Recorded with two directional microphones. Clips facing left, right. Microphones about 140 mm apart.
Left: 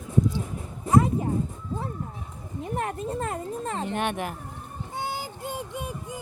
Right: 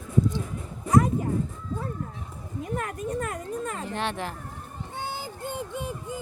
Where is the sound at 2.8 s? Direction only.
30° left (ahead or behind); by 5.6 s 10° left (ahead or behind).